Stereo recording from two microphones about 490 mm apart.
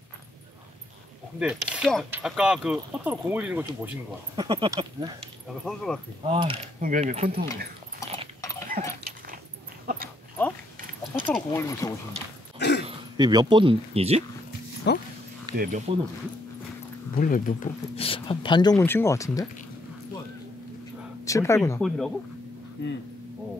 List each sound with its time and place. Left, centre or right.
1.7 s speech: centre
6.2 s mechanisms: centre
8.8 s mechanisms: centre
11.2 s speech: centre
12.5 s throat clearing: left
12.8 s speech: centre
14.8 s speech: centre
15.4 s speech: centre
17.1 s speech: centre
21.2 s speech: centre
22.8 s speech: left